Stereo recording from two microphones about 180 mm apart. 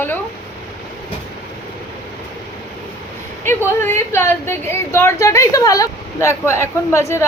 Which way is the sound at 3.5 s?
15° left (ahead or behind).